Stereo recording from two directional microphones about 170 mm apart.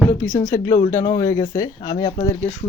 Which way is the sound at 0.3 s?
20° left (ahead or behind).